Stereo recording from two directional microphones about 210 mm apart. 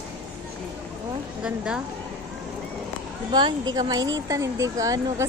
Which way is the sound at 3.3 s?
20° right (ahead or behind).